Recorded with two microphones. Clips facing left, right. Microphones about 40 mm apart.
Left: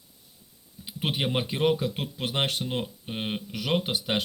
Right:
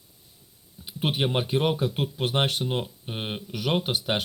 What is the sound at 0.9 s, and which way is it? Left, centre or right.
Speech, centre.